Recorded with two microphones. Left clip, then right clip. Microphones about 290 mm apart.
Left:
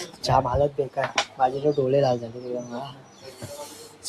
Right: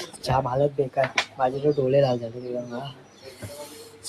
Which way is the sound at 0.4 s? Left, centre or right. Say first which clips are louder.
Even; centre.